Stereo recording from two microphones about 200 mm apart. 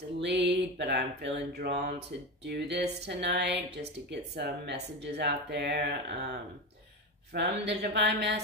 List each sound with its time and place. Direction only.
0.2 s mantra: 60° right (ahead or behind)
7.3 s mantra: 60° right (ahead or behind)